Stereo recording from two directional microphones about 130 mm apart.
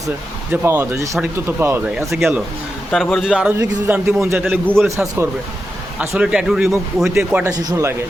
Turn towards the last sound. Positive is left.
turn(degrees=-30)  # may be behind; listen again after turning